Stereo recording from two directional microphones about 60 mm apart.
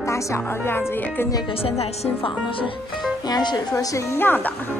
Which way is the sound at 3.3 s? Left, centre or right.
Left.